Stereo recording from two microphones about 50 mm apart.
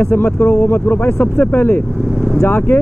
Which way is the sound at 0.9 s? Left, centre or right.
Left.